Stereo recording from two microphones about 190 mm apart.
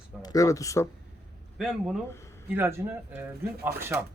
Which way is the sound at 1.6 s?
Centre (ahead or behind).